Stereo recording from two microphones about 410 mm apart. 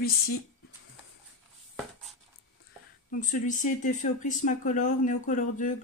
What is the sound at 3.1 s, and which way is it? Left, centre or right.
Speech, centre.